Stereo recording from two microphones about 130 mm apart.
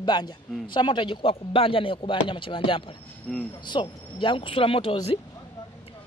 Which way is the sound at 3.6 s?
35° left (ahead or behind).